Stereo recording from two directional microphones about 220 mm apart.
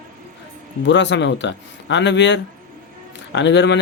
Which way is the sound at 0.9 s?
55° left (ahead or behind).